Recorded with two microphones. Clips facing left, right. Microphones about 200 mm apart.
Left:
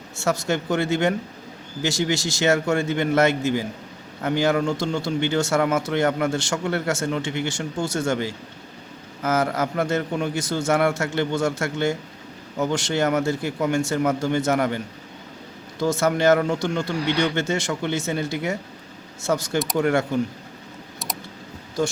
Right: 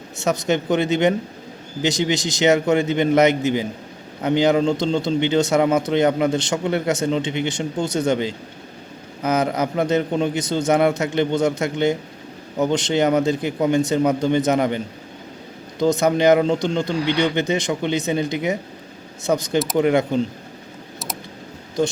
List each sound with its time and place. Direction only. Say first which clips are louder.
0.2 s a man's voice: right 3 dB; 20° right (ahead or behind)
15.8 s a man's voice: right 3 dB; 20° right (ahead or behind)